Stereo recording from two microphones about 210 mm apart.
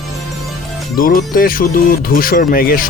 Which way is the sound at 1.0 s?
45° left (ahead or behind).